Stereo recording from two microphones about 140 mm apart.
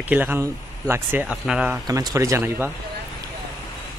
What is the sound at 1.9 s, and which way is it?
Speech, 25° right (ahead or behind).